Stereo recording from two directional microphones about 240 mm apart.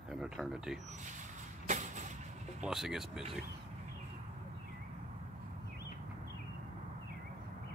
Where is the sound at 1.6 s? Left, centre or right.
Right.